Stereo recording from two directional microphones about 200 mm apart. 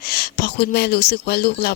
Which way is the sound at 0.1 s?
55° left (ahead or behind).